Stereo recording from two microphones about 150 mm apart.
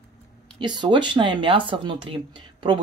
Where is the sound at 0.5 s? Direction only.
30° right (ahead or behind).